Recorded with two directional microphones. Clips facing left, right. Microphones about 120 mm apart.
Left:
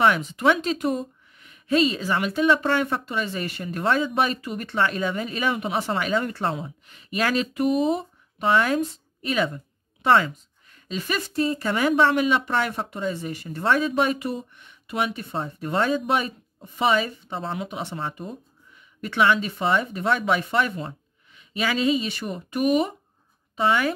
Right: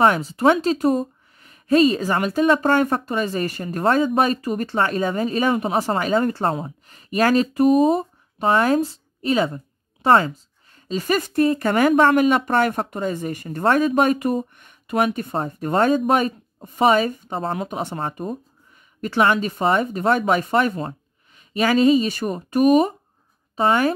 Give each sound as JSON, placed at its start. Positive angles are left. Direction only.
{"t": 0.0, "sound": "a woman's voice", "side_deg": -40}